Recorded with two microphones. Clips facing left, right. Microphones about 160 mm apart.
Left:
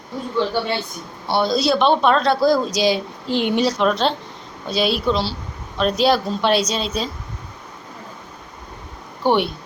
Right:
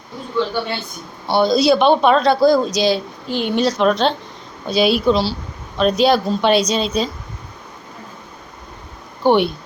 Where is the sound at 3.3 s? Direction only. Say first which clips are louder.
Left 1 dB; 20° left (ahead or behind).